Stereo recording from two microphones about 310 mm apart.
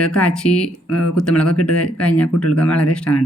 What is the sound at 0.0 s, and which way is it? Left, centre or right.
Speech, centre.